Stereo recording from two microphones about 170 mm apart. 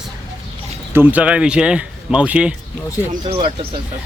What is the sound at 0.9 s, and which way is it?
Speech, 10° right (ahead or behind).